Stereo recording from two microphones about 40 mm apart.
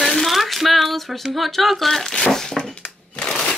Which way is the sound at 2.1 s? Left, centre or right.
Centre.